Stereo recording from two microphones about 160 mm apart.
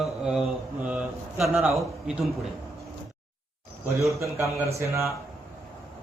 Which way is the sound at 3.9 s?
20° right (ahead or behind).